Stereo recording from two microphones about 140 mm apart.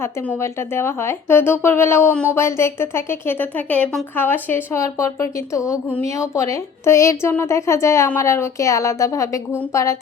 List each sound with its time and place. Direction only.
0.8 s speech: 20° left (ahead or behind)